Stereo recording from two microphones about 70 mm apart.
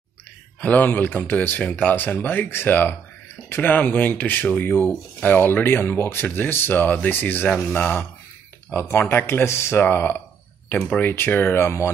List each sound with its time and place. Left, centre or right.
0.6 s speech: left